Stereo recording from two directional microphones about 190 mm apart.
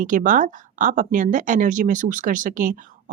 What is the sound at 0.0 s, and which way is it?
Speech, 45° right (ahead or behind).